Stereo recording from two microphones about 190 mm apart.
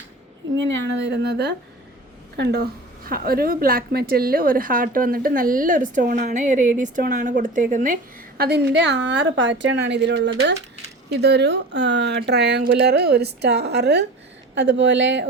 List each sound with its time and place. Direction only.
0.5 s a woman's voice: 70° right (ahead or behind); by 7.9 s 45° right (ahead or behind)
8.4 s a woman's voice: 60° right (ahead or behind)